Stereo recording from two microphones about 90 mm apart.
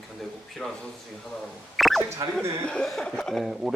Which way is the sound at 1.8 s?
Centre (ahead or behind).